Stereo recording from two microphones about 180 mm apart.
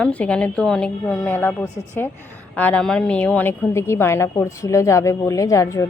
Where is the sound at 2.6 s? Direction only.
5° left (ahead or behind).